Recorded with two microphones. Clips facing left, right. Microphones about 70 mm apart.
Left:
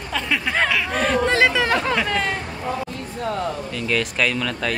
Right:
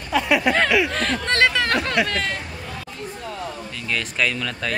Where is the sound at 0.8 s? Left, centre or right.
Centre.